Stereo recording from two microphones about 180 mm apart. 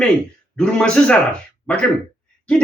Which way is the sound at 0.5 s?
5° left (ahead or behind).